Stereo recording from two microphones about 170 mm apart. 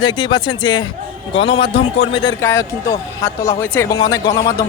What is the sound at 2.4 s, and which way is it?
Speech, 15° left (ahead or behind).